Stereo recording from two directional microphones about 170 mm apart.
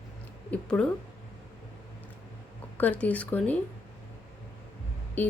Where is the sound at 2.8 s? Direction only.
10° left (ahead or behind).